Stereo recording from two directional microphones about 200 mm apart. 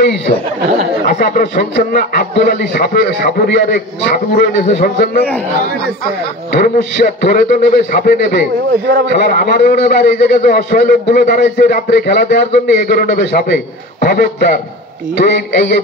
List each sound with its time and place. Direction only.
1.0 s a man's voice: 45° left (ahead or behind)
4.6 s a man's voice: 35° left (ahead or behind)
6.5 s a man's voice: 45° left (ahead or behind)